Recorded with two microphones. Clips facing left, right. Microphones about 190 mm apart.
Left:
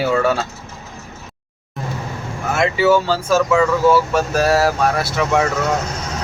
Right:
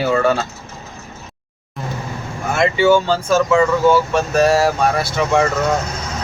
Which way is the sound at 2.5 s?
5° left (ahead or behind).